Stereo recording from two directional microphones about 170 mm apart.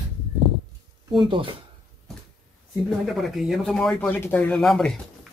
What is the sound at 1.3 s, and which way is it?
Speech, 30° right (ahead or behind).